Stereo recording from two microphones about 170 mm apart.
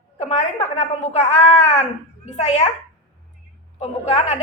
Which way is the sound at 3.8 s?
40° left (ahead or behind).